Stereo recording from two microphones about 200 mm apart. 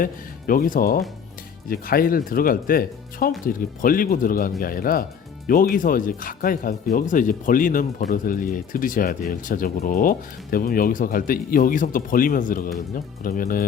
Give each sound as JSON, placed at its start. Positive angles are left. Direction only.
{"t": 0.0, "sound": "speech", "side_deg": 45}